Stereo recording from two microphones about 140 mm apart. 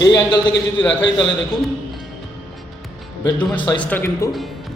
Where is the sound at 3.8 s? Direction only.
10° left (ahead or behind).